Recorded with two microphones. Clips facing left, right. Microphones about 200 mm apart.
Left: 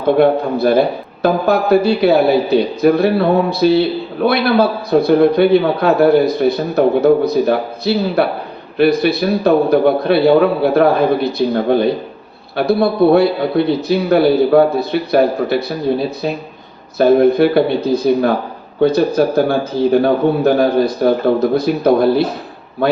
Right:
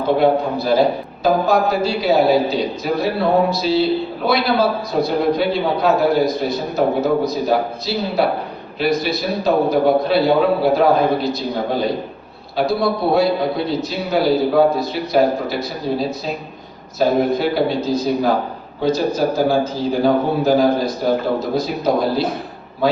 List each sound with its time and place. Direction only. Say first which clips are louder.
0.2 s a man's voice: left 4 dB; 60° left (ahead or behind)